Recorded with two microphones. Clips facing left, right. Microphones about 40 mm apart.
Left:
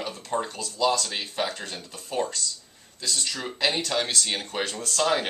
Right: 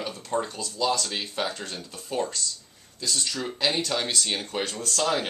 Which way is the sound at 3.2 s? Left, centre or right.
Centre.